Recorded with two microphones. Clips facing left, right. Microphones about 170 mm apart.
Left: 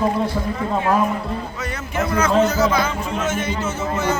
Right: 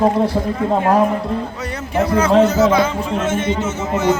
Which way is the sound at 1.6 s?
35° right (ahead or behind).